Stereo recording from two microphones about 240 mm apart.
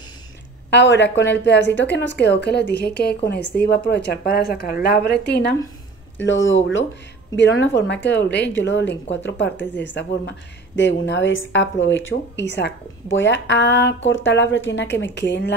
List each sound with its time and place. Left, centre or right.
0.7 s a woman's voice: left